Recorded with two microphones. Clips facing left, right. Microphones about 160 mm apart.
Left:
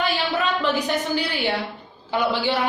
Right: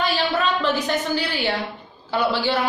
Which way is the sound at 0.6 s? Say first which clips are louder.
Even; 15° left (ahead or behind).